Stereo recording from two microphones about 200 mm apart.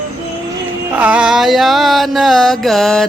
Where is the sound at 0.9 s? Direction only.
5° right (ahead or behind).